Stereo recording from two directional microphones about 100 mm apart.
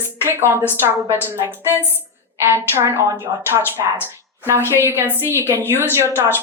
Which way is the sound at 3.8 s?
40° right (ahead or behind).